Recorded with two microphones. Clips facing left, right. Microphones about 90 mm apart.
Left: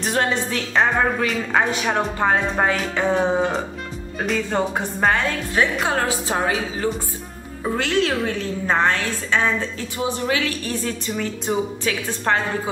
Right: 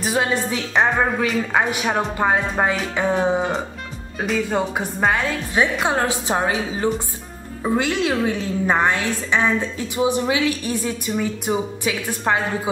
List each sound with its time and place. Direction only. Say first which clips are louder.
0.0 s a woman's voice: right 1 dB; 5° right (ahead or behind)
5.9 s music: right 1 dB; 20° right (ahead or behind)
7.7 s a woman's voice: right 1 dB; 15° right (ahead or behind)